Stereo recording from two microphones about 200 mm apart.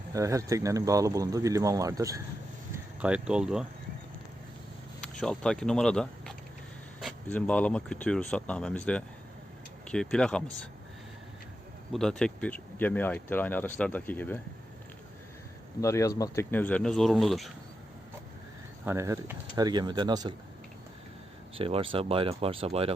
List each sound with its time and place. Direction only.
0.1 s speech: 15° right (ahead or behind)
5.2 s speech: 5° left (ahead or behind)
11.9 s speech: centre (ahead or behind)
15.8 s speech: 15° left (ahead or behind)
18.9 s speech: 15° right (ahead or behind)
21.6 s speech: 25° right (ahead or behind)